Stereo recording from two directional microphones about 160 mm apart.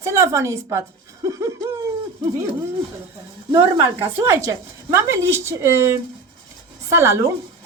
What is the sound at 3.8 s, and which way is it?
A woman's voice, 15° right (ahead or behind).